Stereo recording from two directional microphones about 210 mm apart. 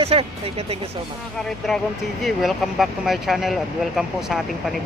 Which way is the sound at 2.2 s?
Centre (ahead or behind).